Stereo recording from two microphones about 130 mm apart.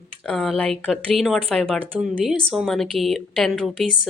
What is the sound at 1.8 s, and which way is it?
Speech, 15° right (ahead or behind).